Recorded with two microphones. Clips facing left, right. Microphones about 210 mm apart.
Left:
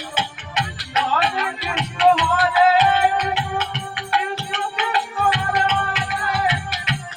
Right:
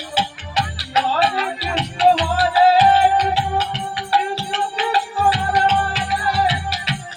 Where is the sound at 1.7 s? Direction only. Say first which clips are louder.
Right 1 dB; 35° right (ahead or behind).